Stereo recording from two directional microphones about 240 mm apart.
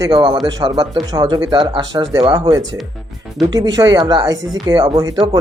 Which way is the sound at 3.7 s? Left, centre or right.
Centre.